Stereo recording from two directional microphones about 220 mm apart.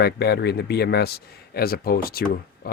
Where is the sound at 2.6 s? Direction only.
45° left (ahead or behind).